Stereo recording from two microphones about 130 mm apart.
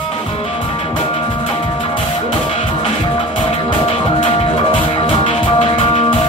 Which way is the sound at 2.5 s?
45° left (ahead or behind).